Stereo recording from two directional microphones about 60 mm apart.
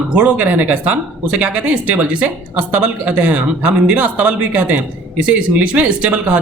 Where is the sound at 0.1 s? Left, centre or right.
Right.